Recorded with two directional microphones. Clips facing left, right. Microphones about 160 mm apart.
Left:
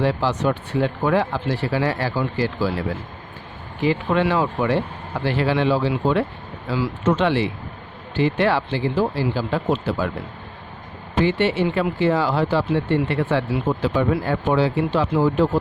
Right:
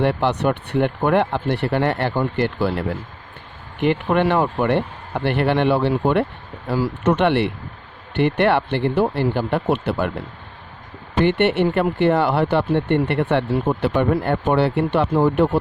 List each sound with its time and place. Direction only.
0.0 s speech: 60° right (ahead or behind)
11.2 s speech: 65° right (ahead or behind)